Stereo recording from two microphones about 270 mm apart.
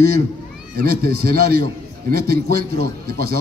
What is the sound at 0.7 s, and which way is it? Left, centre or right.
A man's voice, right.